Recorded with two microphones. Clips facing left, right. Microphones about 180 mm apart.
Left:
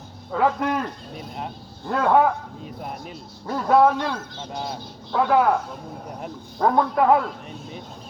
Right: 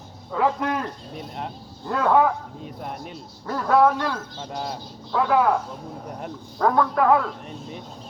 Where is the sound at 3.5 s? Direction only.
20° left (ahead or behind).